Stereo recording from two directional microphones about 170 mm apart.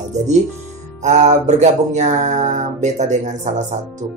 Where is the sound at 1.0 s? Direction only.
45° right (ahead or behind).